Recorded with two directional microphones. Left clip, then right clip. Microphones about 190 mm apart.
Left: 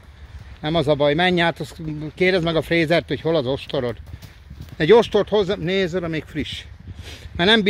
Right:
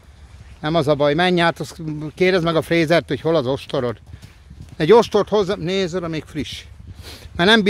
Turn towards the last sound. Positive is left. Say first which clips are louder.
# right 2 dB
turn(degrees=-30)  # may be behind; listen again after turning